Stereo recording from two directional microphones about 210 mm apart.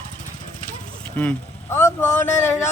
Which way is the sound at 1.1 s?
10° left (ahead or behind).